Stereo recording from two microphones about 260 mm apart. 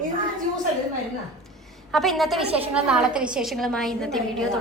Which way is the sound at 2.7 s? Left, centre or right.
Centre.